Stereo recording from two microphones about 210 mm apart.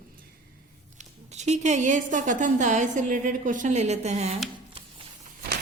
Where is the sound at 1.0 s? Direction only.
35° right (ahead or behind).